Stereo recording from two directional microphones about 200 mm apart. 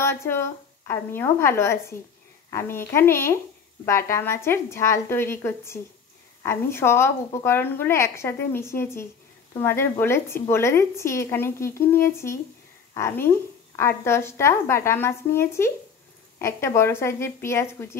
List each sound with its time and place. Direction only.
0.0 s a woman's voice: 10° left (ahead or behind)